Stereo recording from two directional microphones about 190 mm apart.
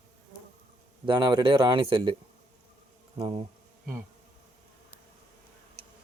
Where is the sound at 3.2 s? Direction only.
25° right (ahead or behind).